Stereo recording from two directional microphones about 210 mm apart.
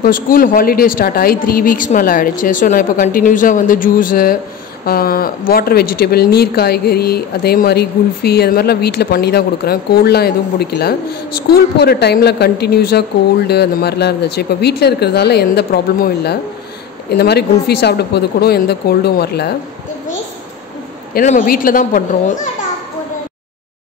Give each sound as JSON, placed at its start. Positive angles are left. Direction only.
{"t": 0.0, "sound": "a woman's voice", "side_deg": 45}
{"t": 21.1, "sound": "a woman's voice", "side_deg": 40}